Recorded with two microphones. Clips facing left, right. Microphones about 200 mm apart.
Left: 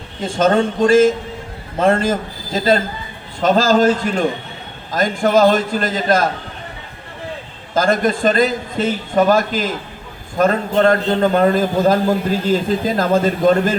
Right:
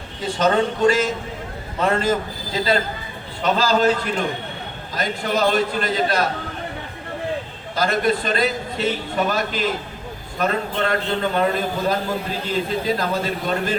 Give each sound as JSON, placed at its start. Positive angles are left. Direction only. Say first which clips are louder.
{"t": 0.2, "sound": "a man's voice", "louder": "left 4 dB", "side_deg": 50}
{"t": 7.7, "sound": "a man's voice", "louder": "left 4 dB", "side_deg": 45}